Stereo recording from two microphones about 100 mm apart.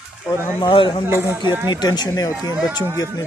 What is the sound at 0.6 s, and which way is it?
Speech, 60° left (ahead or behind).